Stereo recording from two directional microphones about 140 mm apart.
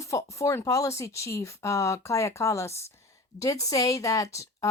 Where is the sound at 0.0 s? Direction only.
20° left (ahead or behind).